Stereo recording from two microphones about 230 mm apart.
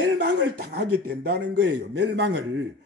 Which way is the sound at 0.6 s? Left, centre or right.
Right.